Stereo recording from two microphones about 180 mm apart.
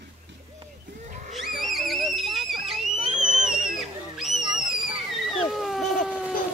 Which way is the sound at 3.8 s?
Centre (ahead or behind).